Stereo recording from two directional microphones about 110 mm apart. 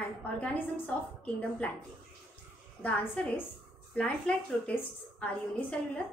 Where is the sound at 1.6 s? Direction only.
10° left (ahead or behind).